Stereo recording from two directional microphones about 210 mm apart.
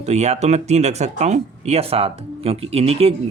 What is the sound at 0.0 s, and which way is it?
Speech, 30° right (ahead or behind).